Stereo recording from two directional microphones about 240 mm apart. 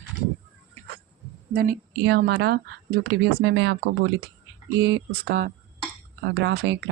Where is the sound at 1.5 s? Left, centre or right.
Right.